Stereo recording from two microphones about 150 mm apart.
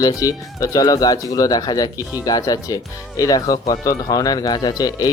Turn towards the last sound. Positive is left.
turn(degrees=25)  # may be behind; listen again after turning